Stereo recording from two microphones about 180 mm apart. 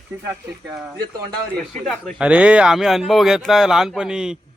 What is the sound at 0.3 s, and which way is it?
Speech, 20° right (ahead or behind).